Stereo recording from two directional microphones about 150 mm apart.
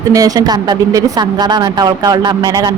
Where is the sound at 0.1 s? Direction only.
25° right (ahead or behind).